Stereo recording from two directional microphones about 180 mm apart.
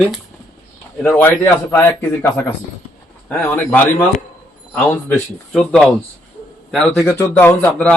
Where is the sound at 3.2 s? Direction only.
10° left (ahead or behind).